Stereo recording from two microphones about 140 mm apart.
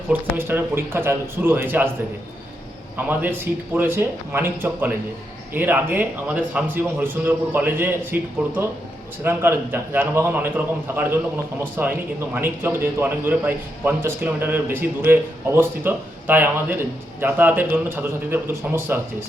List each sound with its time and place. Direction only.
0.1 s speech: 15° right (ahead or behind)
3.1 s speech: 15° right (ahead or behind)